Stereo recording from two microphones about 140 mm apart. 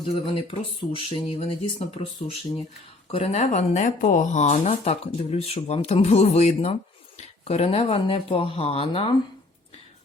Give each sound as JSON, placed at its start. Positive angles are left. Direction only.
{"t": 0.0, "sound": "speech", "side_deg": 40}
{"t": 3.1, "sound": "speech", "side_deg": 45}